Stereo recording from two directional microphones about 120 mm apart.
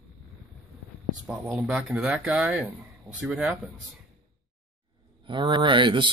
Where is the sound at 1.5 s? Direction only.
10° right (ahead or behind).